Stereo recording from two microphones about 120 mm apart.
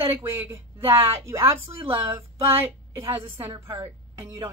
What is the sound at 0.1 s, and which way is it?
A woman's voice, 20° right (ahead or behind).